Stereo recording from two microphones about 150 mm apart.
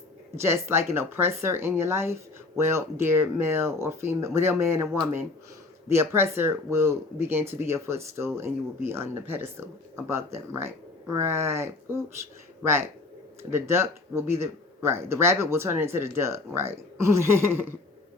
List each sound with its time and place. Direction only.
0.3 s speech: 15° right (ahead or behind)
5.9 s speech: 15° right (ahead or behind)
13.5 s speech: 15° right (ahead or behind)